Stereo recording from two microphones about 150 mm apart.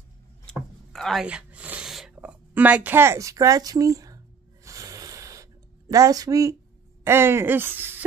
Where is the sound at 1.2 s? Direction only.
10° right (ahead or behind).